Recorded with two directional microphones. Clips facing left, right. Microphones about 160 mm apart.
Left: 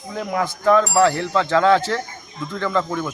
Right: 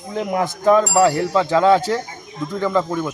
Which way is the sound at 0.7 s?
15° right (ahead or behind).